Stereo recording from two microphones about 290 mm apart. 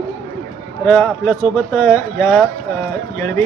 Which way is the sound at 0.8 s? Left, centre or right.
Centre.